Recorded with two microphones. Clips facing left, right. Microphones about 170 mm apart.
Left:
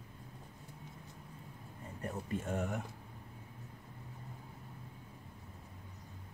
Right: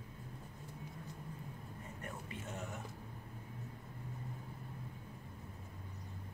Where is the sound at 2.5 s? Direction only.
60° left (ahead or behind).